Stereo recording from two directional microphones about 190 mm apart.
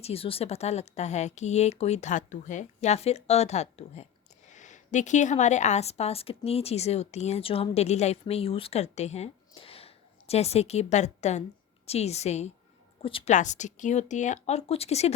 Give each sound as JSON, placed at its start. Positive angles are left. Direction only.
{"t": 0.0, "sound": "a woman's voice", "side_deg": 30}
{"t": 13.3, "sound": "a woman's voice", "side_deg": 40}